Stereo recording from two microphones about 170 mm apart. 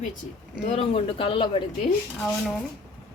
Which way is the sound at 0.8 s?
35° left (ahead or behind).